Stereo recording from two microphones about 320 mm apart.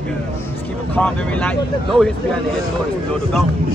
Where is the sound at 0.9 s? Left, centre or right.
Centre.